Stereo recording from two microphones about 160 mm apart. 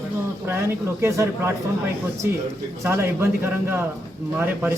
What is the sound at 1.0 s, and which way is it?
Speech, 15° right (ahead or behind).